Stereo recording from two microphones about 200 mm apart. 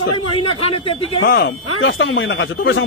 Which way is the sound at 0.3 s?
30° left (ahead or behind).